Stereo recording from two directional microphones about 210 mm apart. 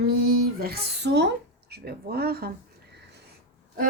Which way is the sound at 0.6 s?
50° right (ahead or behind).